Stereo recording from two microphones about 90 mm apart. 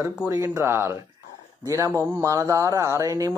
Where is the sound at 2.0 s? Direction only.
30° right (ahead or behind).